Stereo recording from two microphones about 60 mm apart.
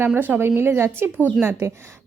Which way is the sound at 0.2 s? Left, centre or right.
Right.